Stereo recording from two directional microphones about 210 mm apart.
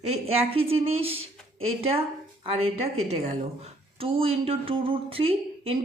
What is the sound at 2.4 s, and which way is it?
Speech, 25° right (ahead or behind).